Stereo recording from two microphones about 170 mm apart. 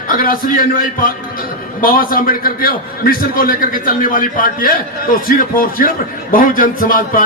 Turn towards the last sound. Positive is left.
turn(degrees=55)  # may be behind; listen again after turning